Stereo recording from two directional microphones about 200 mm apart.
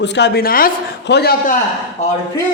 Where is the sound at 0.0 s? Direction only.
55° left (ahead or behind).